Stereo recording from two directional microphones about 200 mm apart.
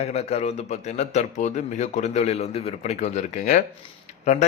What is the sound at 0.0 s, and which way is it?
A man's voice, 30° left (ahead or behind).